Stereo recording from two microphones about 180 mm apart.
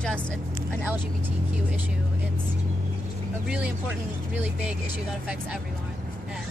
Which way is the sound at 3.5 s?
5° right (ahead or behind).